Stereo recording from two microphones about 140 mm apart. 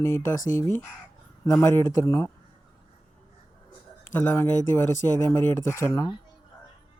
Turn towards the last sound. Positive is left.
turn(degrees=20)  # may be behind; listen again after turning